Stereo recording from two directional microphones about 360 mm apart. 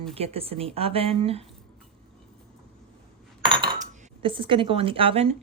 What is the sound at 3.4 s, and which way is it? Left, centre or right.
Cutlery, centre.